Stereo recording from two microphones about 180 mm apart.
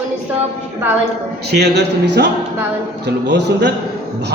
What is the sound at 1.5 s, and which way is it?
A man's voice, 65° right (ahead or behind).